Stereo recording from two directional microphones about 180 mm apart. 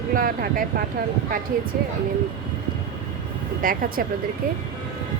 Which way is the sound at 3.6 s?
50° right (ahead or behind).